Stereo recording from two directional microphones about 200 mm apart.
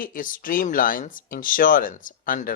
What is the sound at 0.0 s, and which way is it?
Speech, 45° left (ahead or behind).